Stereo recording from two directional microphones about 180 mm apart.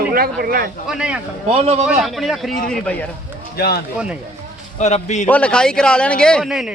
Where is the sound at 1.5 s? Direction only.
35° right (ahead or behind).